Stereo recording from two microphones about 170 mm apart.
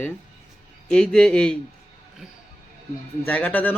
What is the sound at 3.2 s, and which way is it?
Speech, 10° left (ahead or behind).